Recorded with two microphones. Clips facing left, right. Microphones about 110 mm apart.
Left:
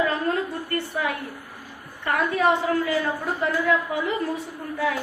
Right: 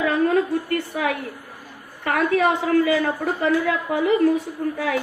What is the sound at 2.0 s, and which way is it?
A woman's voice, 90° right.